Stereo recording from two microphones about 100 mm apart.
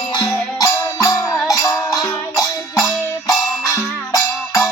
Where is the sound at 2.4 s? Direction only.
35° left (ahead or behind).